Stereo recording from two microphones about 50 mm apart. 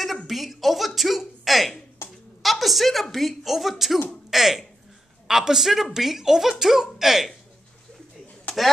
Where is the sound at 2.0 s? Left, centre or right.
Left.